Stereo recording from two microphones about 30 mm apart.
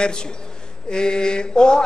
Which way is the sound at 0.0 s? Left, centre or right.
Left.